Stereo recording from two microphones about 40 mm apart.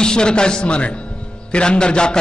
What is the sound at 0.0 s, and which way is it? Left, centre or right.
A man's voice, left.